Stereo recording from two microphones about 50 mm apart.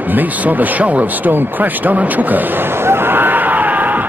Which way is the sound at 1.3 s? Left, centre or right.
Right.